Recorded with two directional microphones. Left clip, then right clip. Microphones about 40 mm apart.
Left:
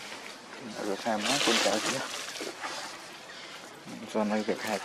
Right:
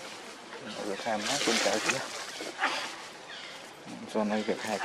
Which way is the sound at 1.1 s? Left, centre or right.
Left.